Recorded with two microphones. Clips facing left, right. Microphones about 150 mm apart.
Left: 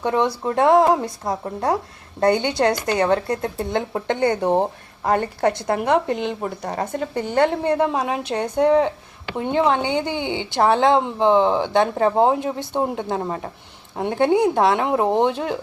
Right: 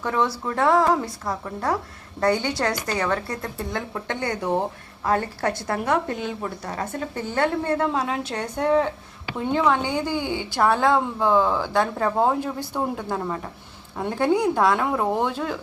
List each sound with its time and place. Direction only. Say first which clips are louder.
0.0 s a woman's voice: left 4 dB; 20° left (ahead or behind)